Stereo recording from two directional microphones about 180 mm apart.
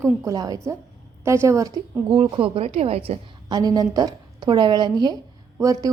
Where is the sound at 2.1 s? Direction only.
30° right (ahead or behind).